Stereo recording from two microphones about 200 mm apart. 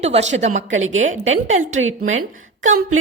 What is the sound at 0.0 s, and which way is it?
Speech, 35° right (ahead or behind).